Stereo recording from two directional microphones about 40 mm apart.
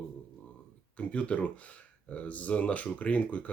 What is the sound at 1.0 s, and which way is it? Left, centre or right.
Speech, left.